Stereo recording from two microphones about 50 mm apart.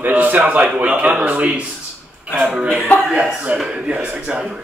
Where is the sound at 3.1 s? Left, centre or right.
Centre.